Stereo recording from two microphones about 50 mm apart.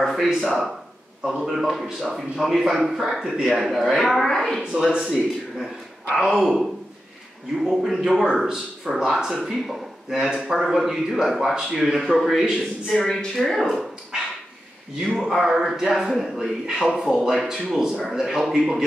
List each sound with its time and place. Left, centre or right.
0.0 s speech: centre
1.4 s speech: centre
4.7 s speech: centre
6.2 s speech: centre
12.9 s speech: centre
15.0 s speech: centre